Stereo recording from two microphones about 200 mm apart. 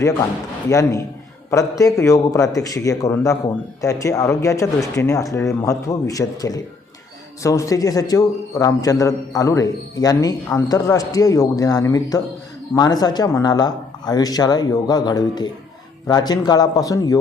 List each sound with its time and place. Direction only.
0.7 s a man's voice: 15° left (ahead or behind)